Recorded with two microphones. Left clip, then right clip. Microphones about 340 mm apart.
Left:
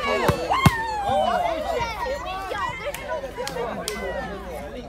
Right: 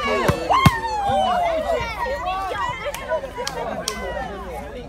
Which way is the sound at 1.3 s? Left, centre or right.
Right.